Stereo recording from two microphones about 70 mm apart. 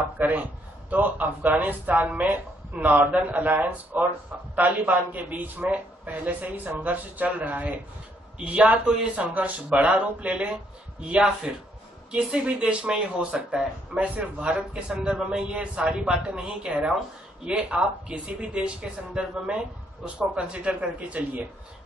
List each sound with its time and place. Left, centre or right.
0.2 s a man's voice: right